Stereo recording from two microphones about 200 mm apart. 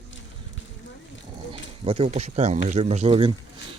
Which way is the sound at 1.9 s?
30° right (ahead or behind).